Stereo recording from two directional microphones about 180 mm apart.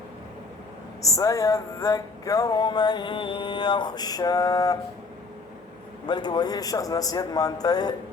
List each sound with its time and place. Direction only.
1.0 s music: 20° left (ahead or behind)
6.1 s music: 25° left (ahead or behind)